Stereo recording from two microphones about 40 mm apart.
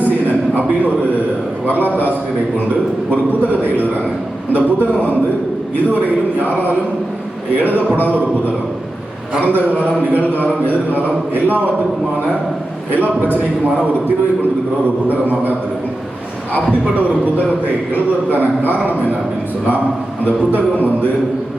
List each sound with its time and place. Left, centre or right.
0.5 s a man's voice: right
1.6 s a sound: left
4.5 s a man's voice: right
9.4 s a man's voice: right
10.3 s a sound: left
11.3 s a man's voice: right
15.1 s a man's voice: right